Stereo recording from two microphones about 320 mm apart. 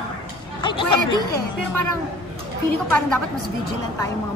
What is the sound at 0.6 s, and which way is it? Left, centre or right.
Speech, centre.